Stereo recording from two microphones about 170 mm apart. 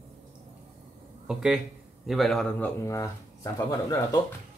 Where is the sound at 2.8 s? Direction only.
15° left (ahead or behind).